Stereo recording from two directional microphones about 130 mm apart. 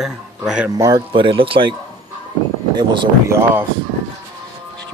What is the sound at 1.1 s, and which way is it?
Speech, 40° right (ahead or behind).